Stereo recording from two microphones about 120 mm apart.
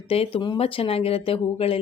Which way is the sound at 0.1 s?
50° left (ahead or behind).